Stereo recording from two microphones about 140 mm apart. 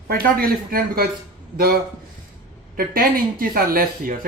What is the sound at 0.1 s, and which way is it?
Speech, 90° right.